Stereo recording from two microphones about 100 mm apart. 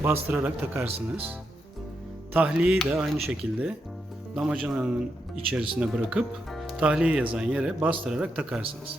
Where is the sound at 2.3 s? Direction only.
15° right (ahead or behind).